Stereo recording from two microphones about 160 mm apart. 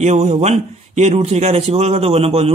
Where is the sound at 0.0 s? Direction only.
45° right (ahead or behind).